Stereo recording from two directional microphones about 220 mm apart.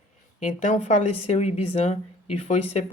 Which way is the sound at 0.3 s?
35° left (ahead or behind).